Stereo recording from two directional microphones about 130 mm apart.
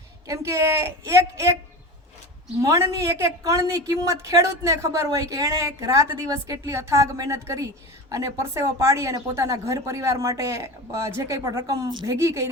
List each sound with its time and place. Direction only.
0.3 s a woman's voice: 25° right (ahead or behind)
2.6 s a woman's voice: 20° right (ahead or behind)